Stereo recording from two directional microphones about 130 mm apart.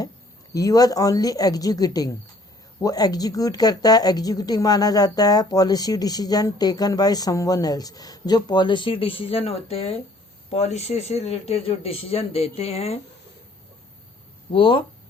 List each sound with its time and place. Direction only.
0.5 s a man's voice: 30° left (ahead or behind); by 13.0 s 50° left (ahead or behind)
14.5 s speech: 40° left (ahead or behind)